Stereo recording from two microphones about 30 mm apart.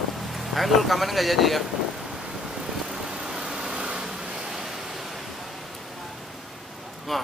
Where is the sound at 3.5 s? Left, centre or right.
Right.